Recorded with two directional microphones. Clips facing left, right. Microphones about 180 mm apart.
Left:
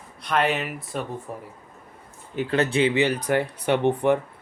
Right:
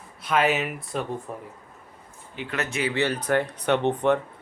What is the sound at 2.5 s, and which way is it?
Speech, 30° left (ahead or behind).